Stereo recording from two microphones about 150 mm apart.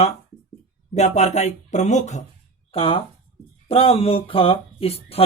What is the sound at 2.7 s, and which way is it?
Speech, 40° left (ahead or behind).